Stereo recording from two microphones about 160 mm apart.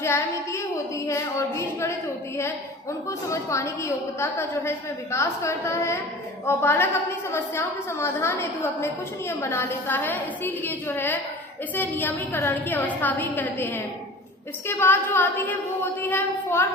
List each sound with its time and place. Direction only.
0.0 s a woman's voice: 15° left (ahead or behind)
3.1 s a woman's voice: 20° left (ahead or behind)